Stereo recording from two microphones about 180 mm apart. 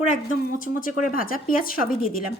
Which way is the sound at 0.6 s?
50° left (ahead or behind).